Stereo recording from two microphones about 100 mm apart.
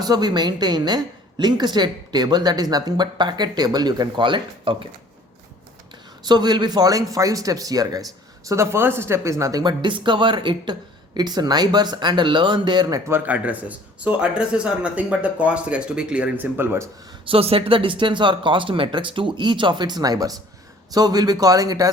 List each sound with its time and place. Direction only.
0.0 s a woman's voice: 45° right (ahead or behind); by 4.9 s 60° right (ahead or behind)
6.2 s a man's voice: 45° right (ahead or behind)
13.1 s speech: 20° right (ahead or behind)
16.6 s speech: 25° right (ahead or behind)
17.2 s a woman's voice: 70° right (ahead or behind); by 21.8 s 40° right (ahead or behind)